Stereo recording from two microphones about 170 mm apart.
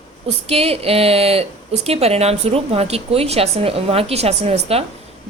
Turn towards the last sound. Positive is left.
turn(degrees=-40)  # may be behind; listen again after turning